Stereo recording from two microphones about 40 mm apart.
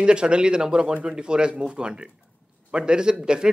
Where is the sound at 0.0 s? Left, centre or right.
Right.